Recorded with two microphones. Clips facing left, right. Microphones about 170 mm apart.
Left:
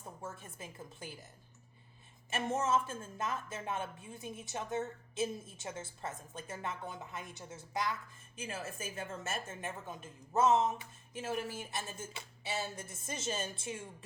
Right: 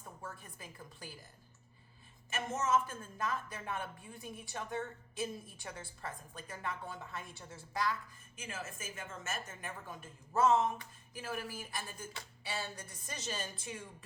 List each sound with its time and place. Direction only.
0.0 s a sound: 25° left (ahead or behind)
2.3 s speech: 30° left (ahead or behind)
8.4 s speech: 30° left (ahead or behind)